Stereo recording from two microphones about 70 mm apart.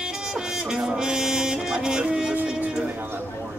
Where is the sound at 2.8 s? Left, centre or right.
Right.